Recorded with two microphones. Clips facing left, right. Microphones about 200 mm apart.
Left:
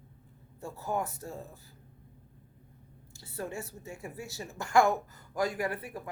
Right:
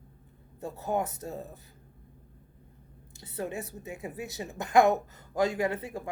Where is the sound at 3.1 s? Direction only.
20° right (ahead or behind).